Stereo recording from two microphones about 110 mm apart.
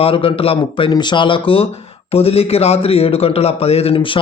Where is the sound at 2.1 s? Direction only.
65° left (ahead or behind).